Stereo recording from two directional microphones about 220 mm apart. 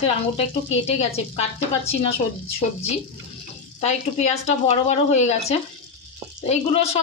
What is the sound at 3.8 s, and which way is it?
A woman's voice, 30° left (ahead or behind).